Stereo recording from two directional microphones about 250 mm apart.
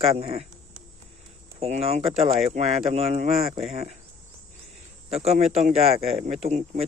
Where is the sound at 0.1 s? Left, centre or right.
Right.